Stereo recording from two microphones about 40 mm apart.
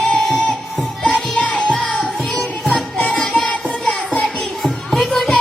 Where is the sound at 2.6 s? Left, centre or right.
Left.